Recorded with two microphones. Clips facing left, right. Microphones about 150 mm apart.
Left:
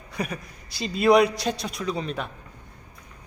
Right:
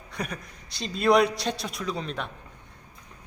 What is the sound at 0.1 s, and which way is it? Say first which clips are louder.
A man's voice: left 3 dB; 5° left (ahead or behind).